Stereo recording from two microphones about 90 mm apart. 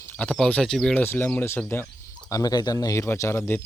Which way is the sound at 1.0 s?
20° left (ahead or behind).